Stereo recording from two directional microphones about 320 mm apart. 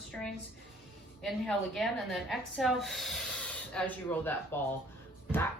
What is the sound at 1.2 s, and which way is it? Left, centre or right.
Speech, centre.